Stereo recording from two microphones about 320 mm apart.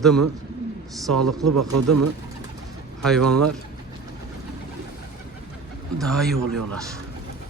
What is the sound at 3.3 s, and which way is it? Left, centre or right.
Speech, right.